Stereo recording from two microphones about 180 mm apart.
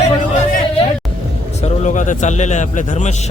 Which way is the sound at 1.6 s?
40° left (ahead or behind).